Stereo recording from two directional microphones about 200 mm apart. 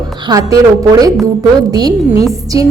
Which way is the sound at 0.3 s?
20° right (ahead or behind).